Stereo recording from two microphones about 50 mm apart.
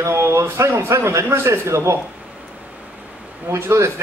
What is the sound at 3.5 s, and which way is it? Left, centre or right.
Speech, right.